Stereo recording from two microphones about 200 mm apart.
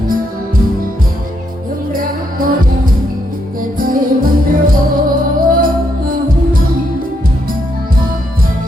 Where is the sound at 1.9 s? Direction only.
45° right (ahead or behind).